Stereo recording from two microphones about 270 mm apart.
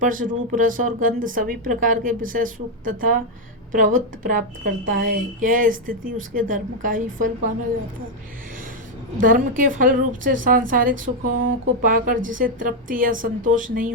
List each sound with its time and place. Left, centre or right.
0.0 s speech: right
9.2 s speech: right